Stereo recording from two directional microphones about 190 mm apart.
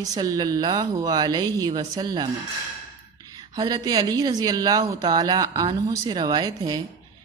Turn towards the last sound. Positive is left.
turn(degrees=-20)  # may be behind; listen again after turning